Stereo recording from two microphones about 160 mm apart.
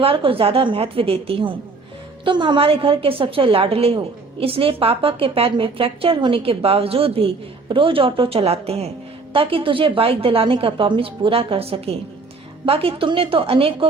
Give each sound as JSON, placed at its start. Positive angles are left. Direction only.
{"t": 0.0, "sound": "a woman's voice", "side_deg": -35}